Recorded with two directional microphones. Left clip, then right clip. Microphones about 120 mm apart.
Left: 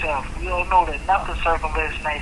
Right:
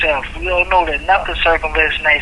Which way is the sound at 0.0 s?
20° right (ahead or behind).